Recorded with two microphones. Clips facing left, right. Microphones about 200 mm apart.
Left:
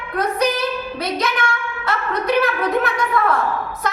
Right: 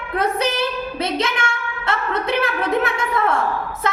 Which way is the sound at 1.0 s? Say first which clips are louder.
Even; 25° right (ahead or behind).